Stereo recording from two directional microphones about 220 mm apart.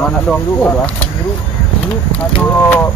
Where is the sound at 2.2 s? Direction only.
10° left (ahead or behind).